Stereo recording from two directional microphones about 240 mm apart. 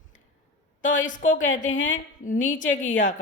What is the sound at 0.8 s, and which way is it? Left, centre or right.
A woman's voice, left.